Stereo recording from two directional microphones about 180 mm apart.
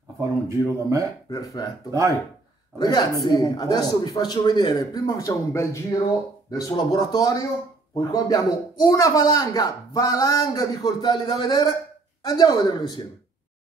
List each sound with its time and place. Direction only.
0.2 s speech: 15° right (ahead or behind)
1.3 s speech: 20° left (ahead or behind)
1.9 s speech: 15° right (ahead or behind)
2.8 s speech: 20° left (ahead or behind)